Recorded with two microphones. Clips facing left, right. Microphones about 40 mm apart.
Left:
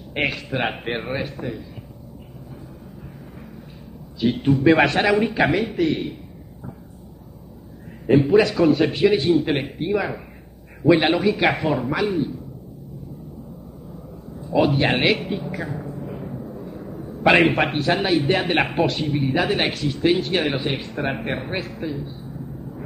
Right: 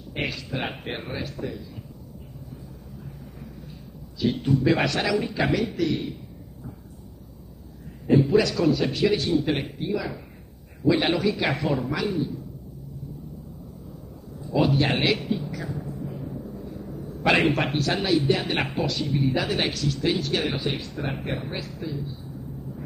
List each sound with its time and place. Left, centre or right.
0.1 s speech: left
4.2 s speech: left
8.3 s speech: left
11.0 s speech: left
14.5 s a sound: left
17.3 s speech: left